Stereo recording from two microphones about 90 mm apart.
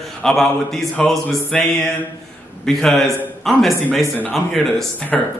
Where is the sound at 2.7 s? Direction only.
5° left (ahead or behind).